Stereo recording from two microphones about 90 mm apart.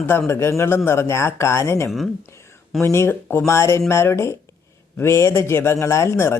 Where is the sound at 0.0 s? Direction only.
30° left (ahead or behind).